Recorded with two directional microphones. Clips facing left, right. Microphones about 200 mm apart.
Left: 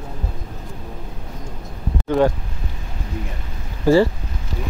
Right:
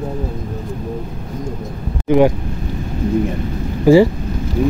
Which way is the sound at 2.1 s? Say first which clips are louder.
Right 5 dB; 15° right (ahead or behind).